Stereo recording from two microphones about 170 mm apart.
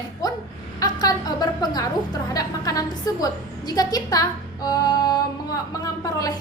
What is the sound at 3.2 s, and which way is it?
A woman's voice, 20° left (ahead or behind).